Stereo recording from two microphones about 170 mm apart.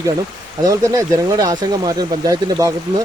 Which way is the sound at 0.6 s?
20° right (ahead or behind).